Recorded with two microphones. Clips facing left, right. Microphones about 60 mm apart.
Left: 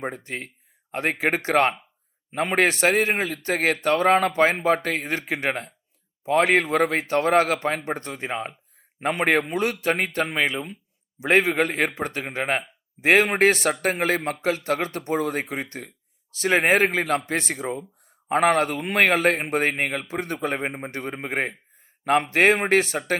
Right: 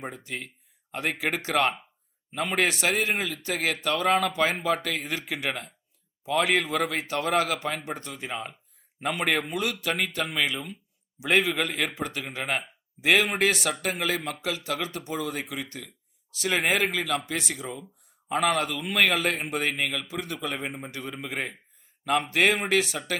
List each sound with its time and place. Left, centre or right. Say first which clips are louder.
0.0 s a man's voice: left 5 dB; left